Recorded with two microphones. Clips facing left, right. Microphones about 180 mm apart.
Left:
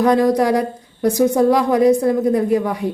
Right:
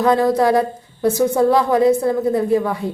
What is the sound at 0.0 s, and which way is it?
Speech, 20° left (ahead or behind).